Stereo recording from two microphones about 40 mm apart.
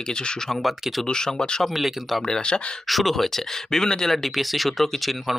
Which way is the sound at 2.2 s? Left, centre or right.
Centre.